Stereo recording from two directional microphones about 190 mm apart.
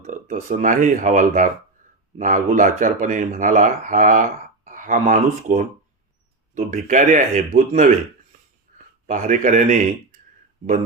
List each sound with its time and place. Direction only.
0.0 s speech: 45° right (ahead or behind)
8.7 s a sound: 45° right (ahead or behind)
9.0 s speech: 45° right (ahead or behind)